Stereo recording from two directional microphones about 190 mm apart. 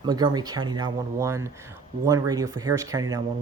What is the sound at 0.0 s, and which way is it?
Speech, 20° right (ahead or behind).